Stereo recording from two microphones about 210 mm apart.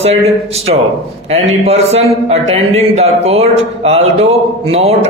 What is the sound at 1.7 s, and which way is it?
Speech, 30° right (ahead or behind).